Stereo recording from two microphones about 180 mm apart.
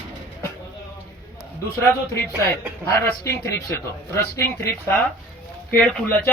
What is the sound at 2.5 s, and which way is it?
Speech, 15° left (ahead or behind).